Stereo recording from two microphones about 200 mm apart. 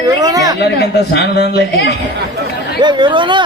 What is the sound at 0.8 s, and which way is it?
A man's voice, 55° left (ahead or behind).